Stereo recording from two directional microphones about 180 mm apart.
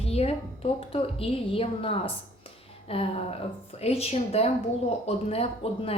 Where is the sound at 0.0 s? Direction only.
35° left (ahead or behind).